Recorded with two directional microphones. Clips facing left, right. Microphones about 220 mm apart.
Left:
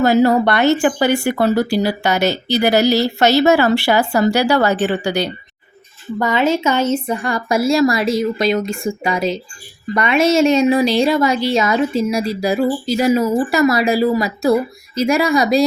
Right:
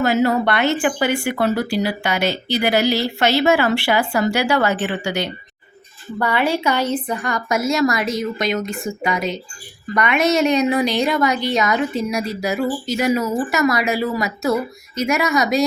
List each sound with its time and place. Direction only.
0.0 s speech: 35° left (ahead or behind)
6.1 s a woman's voice: 15° left (ahead or behind)